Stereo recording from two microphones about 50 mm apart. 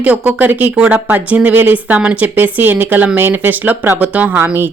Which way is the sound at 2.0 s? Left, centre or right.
Right.